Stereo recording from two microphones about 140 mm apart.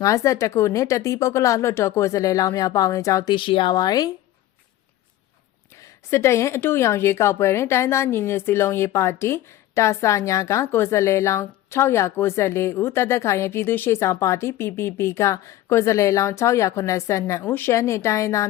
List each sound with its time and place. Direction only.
0.0 s a woman's voice: 20° left (ahead or behind)
3.3 s speech: 35° left (ahead or behind)
5.8 s a woman's voice: 20° left (ahead or behind)